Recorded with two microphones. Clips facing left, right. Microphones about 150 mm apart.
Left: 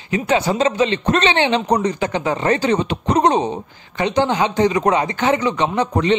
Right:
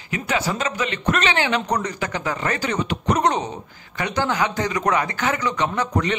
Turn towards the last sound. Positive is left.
turn(degrees=20)  # may be behind; listen again after turning